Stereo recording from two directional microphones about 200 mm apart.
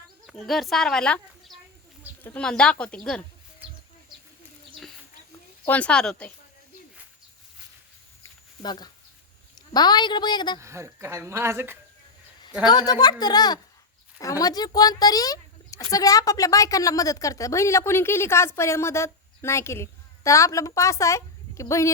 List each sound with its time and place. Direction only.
0.3 s speech: centre (ahead or behind)
5.6 s speech: 5° left (ahead or behind)
8.2 s a sound: 20° left (ahead or behind)
9.6 s a woman's voice: 20° left (ahead or behind)
10.6 s a woman's voice: 15° right (ahead or behind)
12.6 s a woman's voice: 20° left (ahead or behind)